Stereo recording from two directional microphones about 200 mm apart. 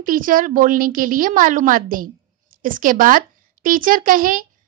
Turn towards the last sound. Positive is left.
turn(degrees=-45)  # may be behind; listen again after turning